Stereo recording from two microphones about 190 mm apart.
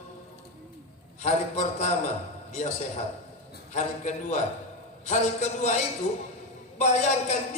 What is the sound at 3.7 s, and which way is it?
Speech, 35° left (ahead or behind).